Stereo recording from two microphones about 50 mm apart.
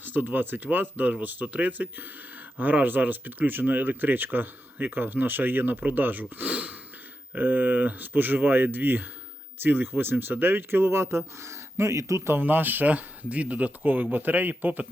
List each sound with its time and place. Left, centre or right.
0.0 s speech: right
12.3 s speech: right